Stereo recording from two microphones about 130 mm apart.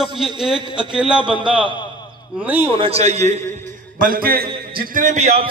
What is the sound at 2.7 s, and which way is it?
Speech, 50° right (ahead or behind).